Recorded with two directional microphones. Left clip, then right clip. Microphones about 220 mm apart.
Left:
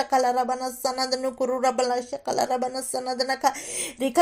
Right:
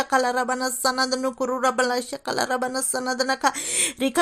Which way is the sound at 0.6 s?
35° right (ahead or behind).